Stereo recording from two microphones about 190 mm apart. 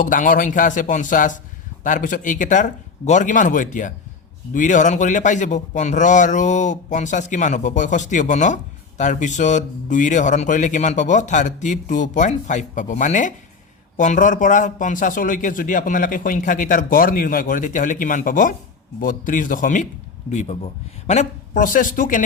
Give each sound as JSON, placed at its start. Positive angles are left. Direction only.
{"t": 0.0, "sound": "a man's voice", "side_deg": 45}